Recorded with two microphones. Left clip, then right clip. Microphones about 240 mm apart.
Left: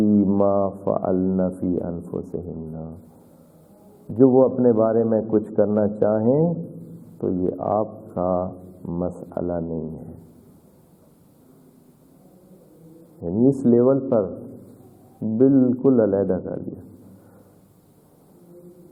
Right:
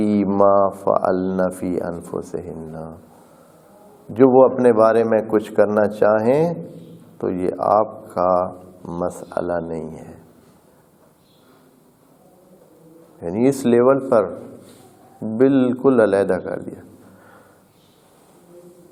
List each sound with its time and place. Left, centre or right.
0.0 s speech: right
4.1 s speech: right
13.2 s speech: right
13.5 s speech: centre